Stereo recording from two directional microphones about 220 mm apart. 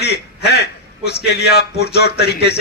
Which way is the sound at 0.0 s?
45° left (ahead or behind).